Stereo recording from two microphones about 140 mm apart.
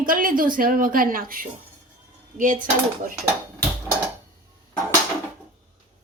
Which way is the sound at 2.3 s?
65° right (ahead or behind).